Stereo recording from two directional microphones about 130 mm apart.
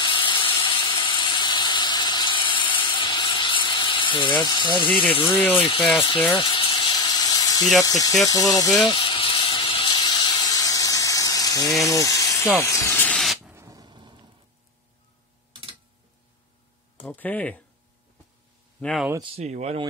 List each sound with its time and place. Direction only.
0.0 s steam: 40° left (ahead or behind)
5.1 s speech: 40° left (ahead or behind)
6.3 s a sound: 40° left (ahead or behind)
7.8 s speech: 30° left (ahead or behind)
8.8 s steam: 40° left (ahead or behind)
11.8 s electric toothbrush: 25° left (ahead or behind)
12.6 s speech: 25° left (ahead or behind)
13.0 s spray: 10° left (ahead or behind)
13.4 s a sound: 20° right (ahead or behind); by 14.2 s 35° right (ahead or behind)
17.0 s speech: 15° left (ahead or behind)
18.8 s speech: 10° left (ahead or behind)
19.2 s speech: 55° right (ahead or behind)